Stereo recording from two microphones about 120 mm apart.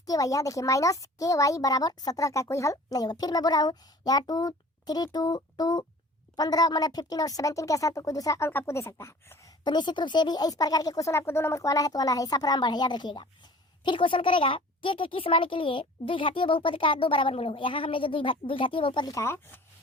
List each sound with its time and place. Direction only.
0.1 s a woman's voice: 30° left (ahead or behind)
9.6 s speech: 40° left (ahead or behind)
19.0 s a woman's voice: 25° left (ahead or behind)